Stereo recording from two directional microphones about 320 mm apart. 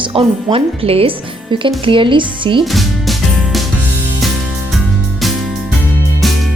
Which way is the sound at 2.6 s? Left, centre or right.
Centre.